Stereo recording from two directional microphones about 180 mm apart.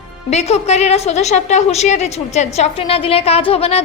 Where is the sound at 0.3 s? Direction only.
35° left (ahead or behind).